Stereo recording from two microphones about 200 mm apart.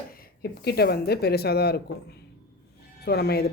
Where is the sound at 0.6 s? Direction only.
50° left (ahead or behind).